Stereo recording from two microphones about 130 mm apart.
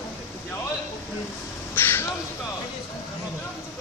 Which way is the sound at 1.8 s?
15° left (ahead or behind).